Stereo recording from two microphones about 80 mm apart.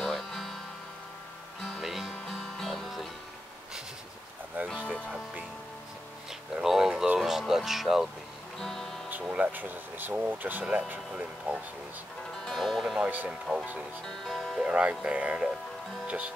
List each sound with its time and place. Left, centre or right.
0.0 s music: centre
1.6 s music: centre
6.5 s a sound: centre
7.2 s music: centre
9.3 s speech: centre
12.4 s speech: centre
13.0 s speech: right
13.3 s speech: centre
14.7 s speech: centre